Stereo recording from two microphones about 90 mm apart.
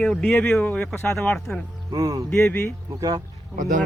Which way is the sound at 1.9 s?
45° right (ahead or behind).